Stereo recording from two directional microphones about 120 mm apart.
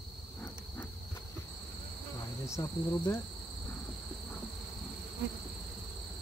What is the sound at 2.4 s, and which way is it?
Cricket, 25° left (ahead or behind).